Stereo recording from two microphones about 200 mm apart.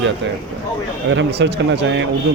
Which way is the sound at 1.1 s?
60° right (ahead or behind).